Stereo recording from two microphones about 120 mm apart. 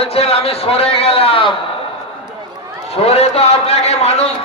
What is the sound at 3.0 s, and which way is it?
A man's voice, 55° left (ahead or behind).